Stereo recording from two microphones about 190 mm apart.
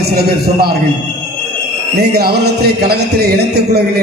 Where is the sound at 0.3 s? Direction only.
55° right (ahead or behind).